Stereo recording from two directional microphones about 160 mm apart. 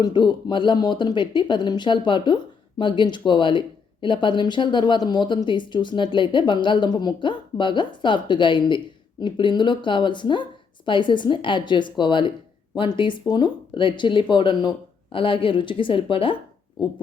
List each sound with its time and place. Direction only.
0.0 s speech: 30° left (ahead or behind)